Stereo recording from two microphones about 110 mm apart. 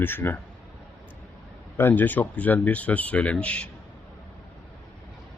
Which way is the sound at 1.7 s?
20° left (ahead or behind).